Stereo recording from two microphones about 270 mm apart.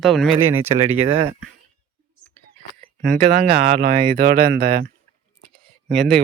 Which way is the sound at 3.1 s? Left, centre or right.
Right.